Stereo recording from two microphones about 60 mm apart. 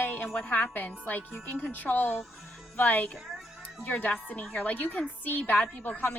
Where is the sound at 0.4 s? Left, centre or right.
Left.